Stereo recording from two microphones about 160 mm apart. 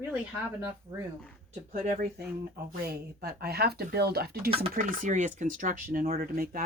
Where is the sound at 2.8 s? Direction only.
75° right (ahead or behind).